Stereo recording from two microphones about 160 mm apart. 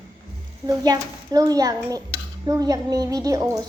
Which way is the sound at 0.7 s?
25° right (ahead or behind).